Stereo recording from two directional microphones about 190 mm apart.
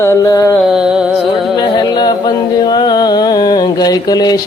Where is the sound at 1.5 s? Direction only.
25° left (ahead or behind).